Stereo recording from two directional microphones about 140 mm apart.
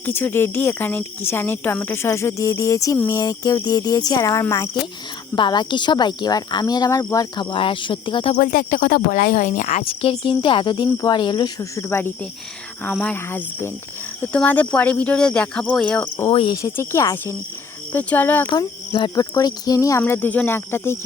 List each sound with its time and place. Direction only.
0.0 s speech: 15° left (ahead or behind)
5.3 s speech: 30° left (ahead or behind)
7.5 s speech: 40° left (ahead or behind)
8.4 s speech: 80° left; by 9.8 s 60° left (ahead or behind)
9.8 s speech: 40° left (ahead or behind); by 16.0 s 5° left (ahead or behind)
16.3 s speech: 40° left (ahead or behind)
16.6 s speech: 20° left (ahead or behind)
18.5 s speech: 35° left (ahead or behind); by 21.0 s 15° left (ahead or behind)